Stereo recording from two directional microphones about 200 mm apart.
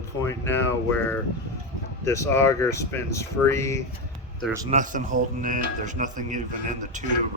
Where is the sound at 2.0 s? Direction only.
15° left (ahead or behind).